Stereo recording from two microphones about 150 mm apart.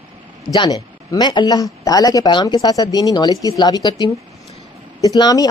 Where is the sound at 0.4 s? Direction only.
30° left (ahead or behind).